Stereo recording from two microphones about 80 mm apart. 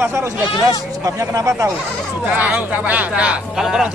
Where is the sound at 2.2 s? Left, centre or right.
Centre.